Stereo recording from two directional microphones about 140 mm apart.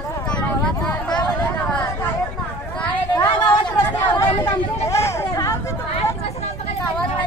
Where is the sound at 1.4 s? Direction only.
10° left (ahead or behind).